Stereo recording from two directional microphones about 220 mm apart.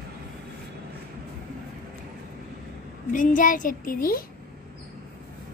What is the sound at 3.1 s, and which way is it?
A child's voice, 35° left (ahead or behind).